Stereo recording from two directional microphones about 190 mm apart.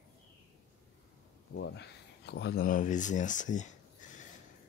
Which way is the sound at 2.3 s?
60° left (ahead or behind).